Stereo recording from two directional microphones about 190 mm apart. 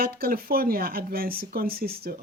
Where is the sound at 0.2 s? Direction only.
50° right (ahead or behind).